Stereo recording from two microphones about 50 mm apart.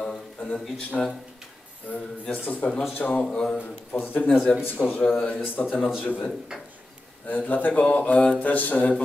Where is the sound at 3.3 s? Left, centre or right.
Centre.